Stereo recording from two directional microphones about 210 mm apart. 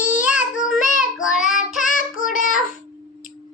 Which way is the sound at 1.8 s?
40° left (ahead or behind).